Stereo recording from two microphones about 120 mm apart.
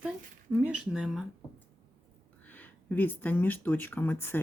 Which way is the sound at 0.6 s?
10° right (ahead or behind).